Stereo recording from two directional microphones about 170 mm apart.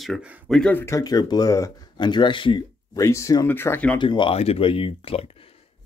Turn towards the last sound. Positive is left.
turn(degrees=35)  # may be behind; listen again after turning